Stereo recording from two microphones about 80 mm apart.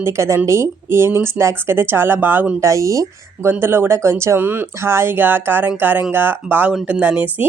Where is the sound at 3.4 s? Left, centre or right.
Right.